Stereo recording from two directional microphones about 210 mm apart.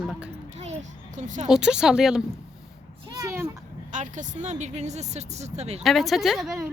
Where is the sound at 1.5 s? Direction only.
5° right (ahead or behind).